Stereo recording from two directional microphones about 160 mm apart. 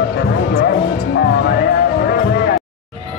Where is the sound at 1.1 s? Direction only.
85° left.